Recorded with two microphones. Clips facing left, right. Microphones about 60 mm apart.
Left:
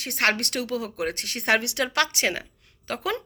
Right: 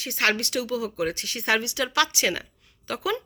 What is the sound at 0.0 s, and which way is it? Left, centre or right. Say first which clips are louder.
Speech: even; left.